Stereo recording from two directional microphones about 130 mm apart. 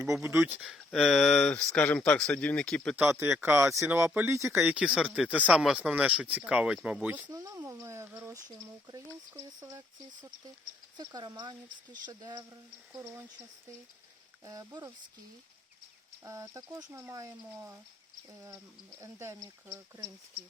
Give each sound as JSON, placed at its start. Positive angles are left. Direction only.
{"t": 0.1, "sound": "speech", "side_deg": -20}
{"t": 0.6, "sound": "speech", "side_deg": 0}
{"t": 2.9, "sound": "speech", "side_deg": -15}
{"t": 4.6, "sound": "speech", "side_deg": -5}
{"t": 7.3, "sound": "speech", "side_deg": -25}
{"t": 10.9, "sound": "speech", "side_deg": -30}
{"t": 14.4, "sound": "speech", "side_deg": -25}
{"t": 16.2, "sound": "speech", "side_deg": -25}
{"t": 18.4, "sound": "speech", "side_deg": -20}